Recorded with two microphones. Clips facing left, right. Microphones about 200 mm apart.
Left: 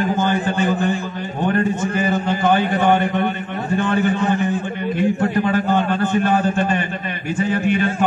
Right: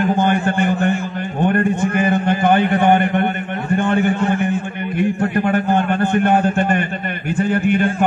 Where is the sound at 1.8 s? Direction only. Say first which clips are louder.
Right 3 dB; 60° right (ahead or behind).